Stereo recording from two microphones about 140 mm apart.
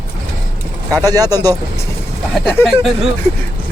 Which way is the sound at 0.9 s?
25° right (ahead or behind).